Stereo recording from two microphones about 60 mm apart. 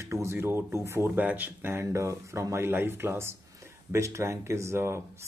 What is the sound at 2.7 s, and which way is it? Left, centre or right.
Speech, right.